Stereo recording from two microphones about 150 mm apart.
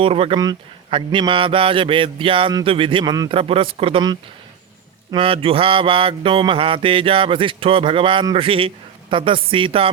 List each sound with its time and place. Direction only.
0.0 s mantra: 40° right (ahead or behind)